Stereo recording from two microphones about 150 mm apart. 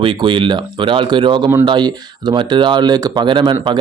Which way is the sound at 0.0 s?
35° right (ahead or behind).